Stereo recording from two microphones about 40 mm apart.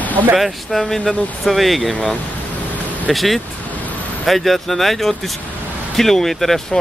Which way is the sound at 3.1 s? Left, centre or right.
Centre.